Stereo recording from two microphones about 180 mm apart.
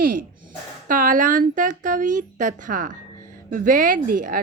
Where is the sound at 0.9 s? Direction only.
50° right (ahead or behind).